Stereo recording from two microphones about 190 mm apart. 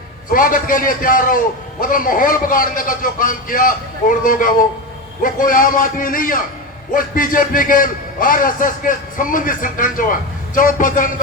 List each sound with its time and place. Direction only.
0.3 s a man's voice: 45° left (ahead or behind)